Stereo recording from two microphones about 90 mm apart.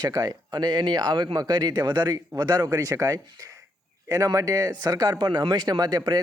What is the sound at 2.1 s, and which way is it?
A man's voice, 45° right (ahead or behind).